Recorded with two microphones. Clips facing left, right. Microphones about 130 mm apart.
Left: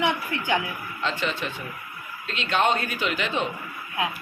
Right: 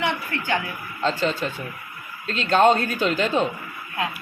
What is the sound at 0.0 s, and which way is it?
Speech, 15° left (ahead or behind).